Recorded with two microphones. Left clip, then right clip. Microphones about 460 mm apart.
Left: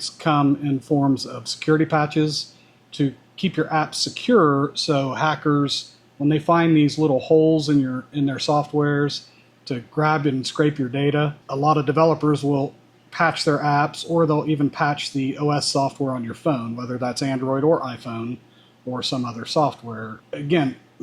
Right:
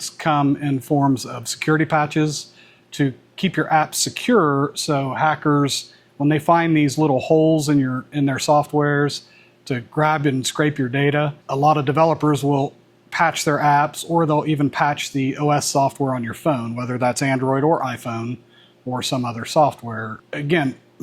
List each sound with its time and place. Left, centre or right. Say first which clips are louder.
0.2 s speech: right 1 dB; right